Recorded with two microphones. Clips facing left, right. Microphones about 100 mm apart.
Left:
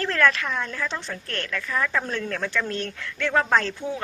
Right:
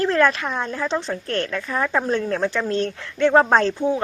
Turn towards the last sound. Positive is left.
turn(degrees=-25)  # may be behind; listen again after turning